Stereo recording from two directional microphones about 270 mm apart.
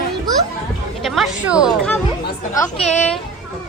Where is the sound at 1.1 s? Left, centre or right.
Centre.